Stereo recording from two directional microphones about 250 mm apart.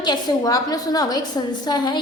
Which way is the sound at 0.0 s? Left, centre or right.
Centre.